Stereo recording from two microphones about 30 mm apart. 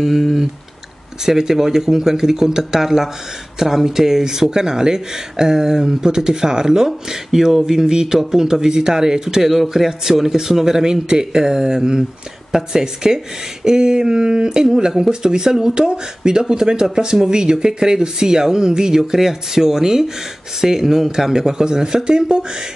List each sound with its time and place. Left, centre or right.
0.0 s speech: centre
9.5 s a man's voice: centre; by 22.4 s right